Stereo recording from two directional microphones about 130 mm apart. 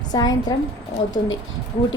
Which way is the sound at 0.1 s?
30° left (ahead or behind).